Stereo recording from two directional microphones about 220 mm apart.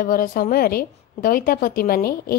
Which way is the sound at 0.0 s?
40° left (ahead or behind).